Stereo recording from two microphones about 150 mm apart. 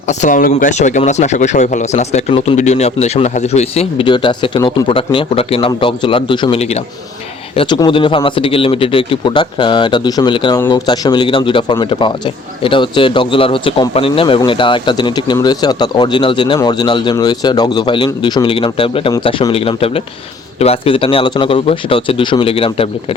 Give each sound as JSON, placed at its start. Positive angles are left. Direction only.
{"t": 0.1, "sound": "speech", "side_deg": 55}
{"t": 6.6, "sound": "speech", "side_deg": 45}